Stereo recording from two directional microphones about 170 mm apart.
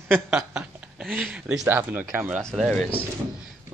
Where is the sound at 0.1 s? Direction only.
10° right (ahead or behind).